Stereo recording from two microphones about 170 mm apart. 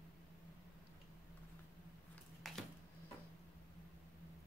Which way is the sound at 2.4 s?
Centre (ahead or behind).